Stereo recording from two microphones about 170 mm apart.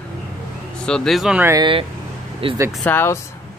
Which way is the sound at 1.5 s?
25° right (ahead or behind).